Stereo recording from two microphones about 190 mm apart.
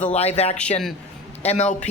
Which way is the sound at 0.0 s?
35° left (ahead or behind).